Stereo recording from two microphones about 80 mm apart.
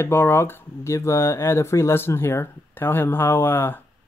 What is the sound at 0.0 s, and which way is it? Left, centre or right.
Speech, left.